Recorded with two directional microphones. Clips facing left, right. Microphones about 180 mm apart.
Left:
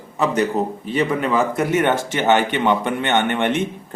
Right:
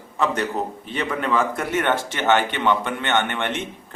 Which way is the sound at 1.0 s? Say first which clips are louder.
Left 4 dB; 10° left (ahead or behind).